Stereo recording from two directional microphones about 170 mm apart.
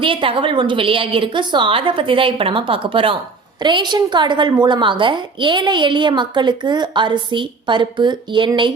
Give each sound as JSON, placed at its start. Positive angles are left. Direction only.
{"t": 0.0, "sound": "a woman's voice", "side_deg": -30}